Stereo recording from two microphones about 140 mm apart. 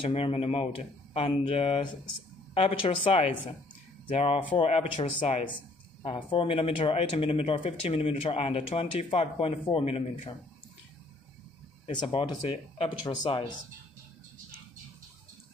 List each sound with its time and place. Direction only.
0.0 s speech: 45° left (ahead or behind)
11.9 s speech: 35° left (ahead or behind)